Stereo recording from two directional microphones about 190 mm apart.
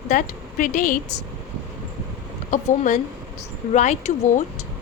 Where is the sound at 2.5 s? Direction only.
40° left (ahead or behind).